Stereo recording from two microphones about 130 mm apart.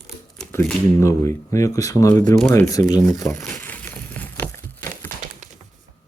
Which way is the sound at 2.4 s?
15° left (ahead or behind).